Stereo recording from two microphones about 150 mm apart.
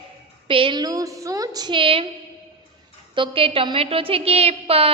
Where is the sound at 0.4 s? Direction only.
35° right (ahead or behind).